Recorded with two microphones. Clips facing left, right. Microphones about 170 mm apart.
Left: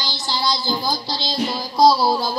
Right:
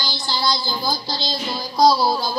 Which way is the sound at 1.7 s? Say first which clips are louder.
Left 1 dB; 5° left (ahead or behind).